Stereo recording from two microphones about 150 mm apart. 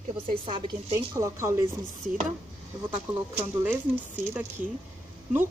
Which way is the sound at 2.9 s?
10° right (ahead or behind).